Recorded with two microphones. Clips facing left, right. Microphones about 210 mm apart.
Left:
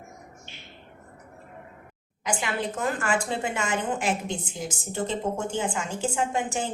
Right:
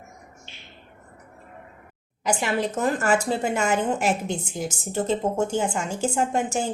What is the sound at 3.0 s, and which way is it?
A woman's voice, 40° right (ahead or behind).